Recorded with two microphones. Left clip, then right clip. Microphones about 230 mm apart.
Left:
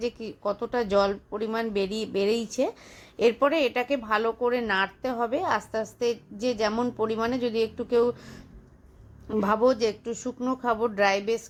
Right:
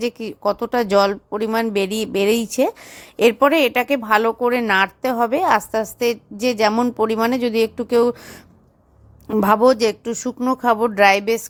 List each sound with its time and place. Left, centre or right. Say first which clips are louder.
0.0 s speech: right 8 dB; right